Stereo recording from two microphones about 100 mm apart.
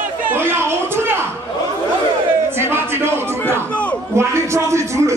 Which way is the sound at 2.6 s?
25° right (ahead or behind).